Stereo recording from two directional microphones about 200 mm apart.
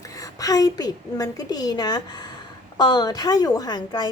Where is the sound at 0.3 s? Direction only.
15° left (ahead or behind).